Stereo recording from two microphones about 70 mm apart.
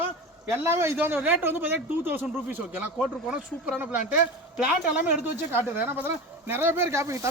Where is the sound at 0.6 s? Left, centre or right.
Right.